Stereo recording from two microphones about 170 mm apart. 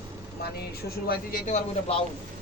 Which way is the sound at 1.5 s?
40° left (ahead or behind).